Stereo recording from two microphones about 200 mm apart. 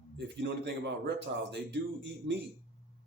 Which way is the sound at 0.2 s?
60° right (ahead or behind).